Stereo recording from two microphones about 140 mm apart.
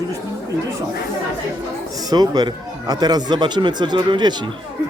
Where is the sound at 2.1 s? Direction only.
30° right (ahead or behind).